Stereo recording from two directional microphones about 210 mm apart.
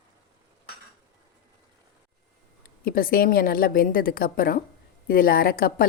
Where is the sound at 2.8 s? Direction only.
45° left (ahead or behind).